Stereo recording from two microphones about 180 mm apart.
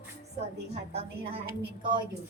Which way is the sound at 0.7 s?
35° right (ahead or behind).